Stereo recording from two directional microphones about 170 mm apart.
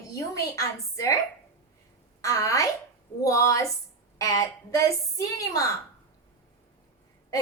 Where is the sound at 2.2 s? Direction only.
20° left (ahead or behind).